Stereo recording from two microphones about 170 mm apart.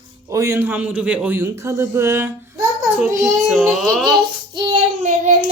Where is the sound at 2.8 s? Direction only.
15° right (ahead or behind).